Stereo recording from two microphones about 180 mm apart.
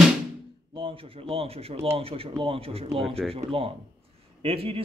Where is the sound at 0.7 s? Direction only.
30° right (ahead or behind).